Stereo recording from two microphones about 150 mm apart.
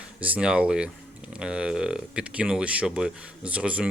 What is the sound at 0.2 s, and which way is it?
Speech, 10° right (ahead or behind).